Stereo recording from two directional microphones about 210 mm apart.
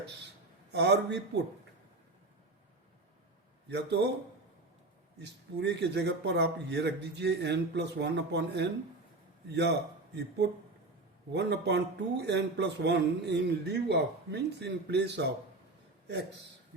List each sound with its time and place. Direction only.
0.7 s speech: 55° right (ahead or behind)
3.7 s a man's voice: 55° right (ahead or behind)
5.2 s a man's voice: 55° right (ahead or behind)